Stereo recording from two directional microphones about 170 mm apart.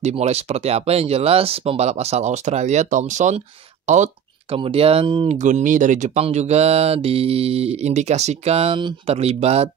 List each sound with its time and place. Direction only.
0.0 s speech: 40° right (ahead or behind)
4.6 s speech: 35° right (ahead or behind)
5.4 s speech: 50° right (ahead or behind)